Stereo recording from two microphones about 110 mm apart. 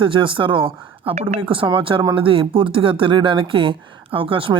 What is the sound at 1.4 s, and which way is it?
Speech, 50° right (ahead or behind).